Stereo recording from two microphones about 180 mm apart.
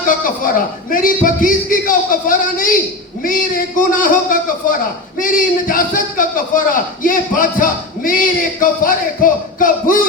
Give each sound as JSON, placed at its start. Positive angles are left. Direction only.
{"t": 0.3, "sound": "a man's voice", "side_deg": 50}
{"t": 3.8, "sound": "a man's voice", "side_deg": 50}